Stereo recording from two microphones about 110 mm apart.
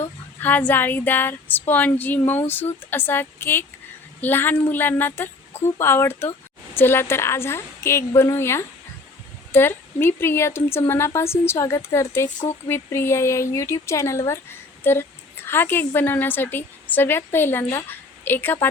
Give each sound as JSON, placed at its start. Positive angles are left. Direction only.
{"t": 0.3, "sound": "a woman's voice", "side_deg": 15}